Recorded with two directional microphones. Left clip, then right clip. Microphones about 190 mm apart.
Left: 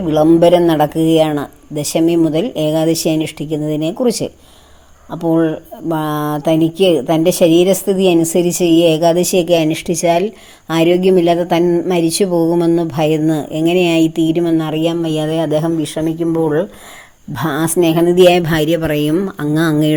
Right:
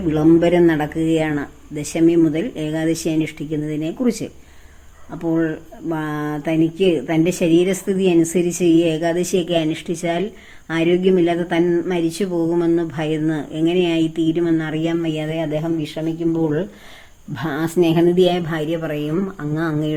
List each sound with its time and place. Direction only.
0.1 s speech: 30° left (ahead or behind)
15.1 s speech: 45° left (ahead or behind)
16.0 s speech: 30° left (ahead or behind)
18.3 s speech: 50° left (ahead or behind)